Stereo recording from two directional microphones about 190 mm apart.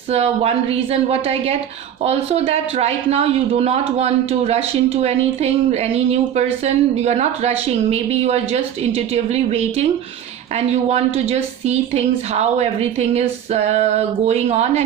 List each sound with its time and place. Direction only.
0.1 s speech: 30° right (ahead or behind)